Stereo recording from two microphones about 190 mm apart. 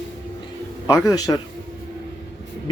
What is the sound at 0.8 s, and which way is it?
Speech, 20° left (ahead or behind).